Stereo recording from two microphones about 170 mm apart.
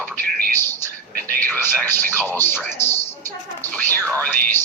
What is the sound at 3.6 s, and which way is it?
Speech, 10° left (ahead or behind).